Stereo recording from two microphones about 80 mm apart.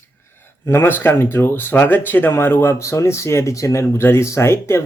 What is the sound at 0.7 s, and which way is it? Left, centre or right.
Speech, left.